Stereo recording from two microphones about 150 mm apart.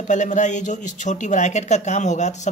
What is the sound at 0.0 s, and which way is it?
A man's voice, 55° left (ahead or behind).